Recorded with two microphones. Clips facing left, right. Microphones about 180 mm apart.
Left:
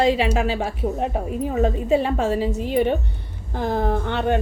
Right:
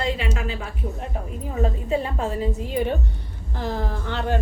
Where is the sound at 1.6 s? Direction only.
75° left (ahead or behind).